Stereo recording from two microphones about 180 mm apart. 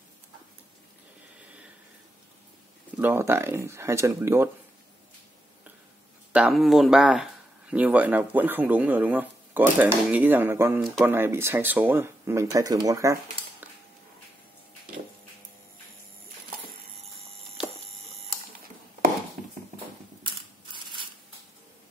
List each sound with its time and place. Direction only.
3.0 s speech: 15° right (ahead or behind)
6.3 s speech: 5° right (ahead or behind)
17.0 s clock: 35° right (ahead or behind)
20.7 s crushing: 25° right (ahead or behind)